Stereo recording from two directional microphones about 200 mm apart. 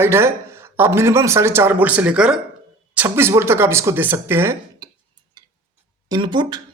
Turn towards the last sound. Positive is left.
turn(degrees=-20)  # may be behind; listen again after turning